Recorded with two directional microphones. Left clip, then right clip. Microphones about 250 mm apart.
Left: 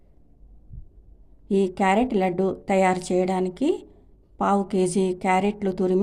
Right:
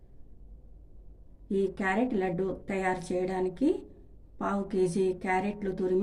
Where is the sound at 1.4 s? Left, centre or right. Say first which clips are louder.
Left 8 dB; left.